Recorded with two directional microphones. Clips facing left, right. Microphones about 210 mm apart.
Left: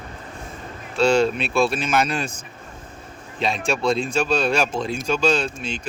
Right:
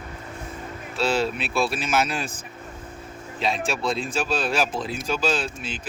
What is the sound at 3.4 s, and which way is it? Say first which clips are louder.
Speech: left 3 dB; centre (ahead or behind).